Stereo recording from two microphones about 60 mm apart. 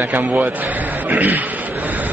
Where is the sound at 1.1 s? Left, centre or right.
Right.